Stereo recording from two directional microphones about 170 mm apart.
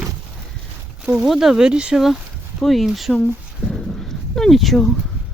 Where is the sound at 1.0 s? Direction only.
5° right (ahead or behind).